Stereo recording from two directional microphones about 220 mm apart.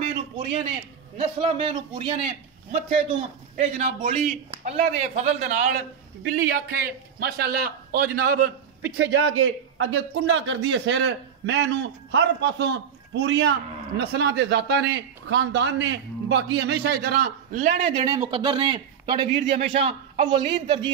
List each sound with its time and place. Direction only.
1.1 s a man's voice: 25° right (ahead or behind); by 8.5 s 40° right (ahead or behind)
8.9 s a man's voice: 55° right (ahead or behind); by 20.9 s 25° right (ahead or behind)